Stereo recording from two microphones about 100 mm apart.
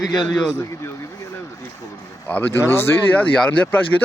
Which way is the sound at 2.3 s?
20° left (ahead or behind).